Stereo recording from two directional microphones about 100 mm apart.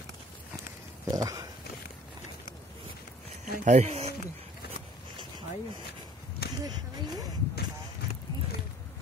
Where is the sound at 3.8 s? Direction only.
90° right.